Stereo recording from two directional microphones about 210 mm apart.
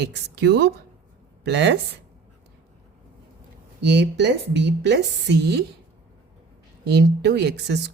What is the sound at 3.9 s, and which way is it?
A woman's voice, 55° right (ahead or behind).